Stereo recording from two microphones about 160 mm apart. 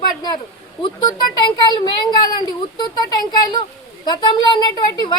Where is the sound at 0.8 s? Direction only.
30° left (ahead or behind).